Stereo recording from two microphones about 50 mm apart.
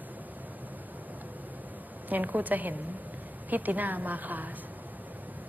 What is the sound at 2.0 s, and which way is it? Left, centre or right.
A woman's voice, right.